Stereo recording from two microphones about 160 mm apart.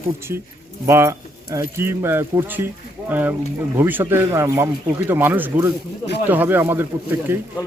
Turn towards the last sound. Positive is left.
turn(degrees=-15)  # may be behind; listen again after turning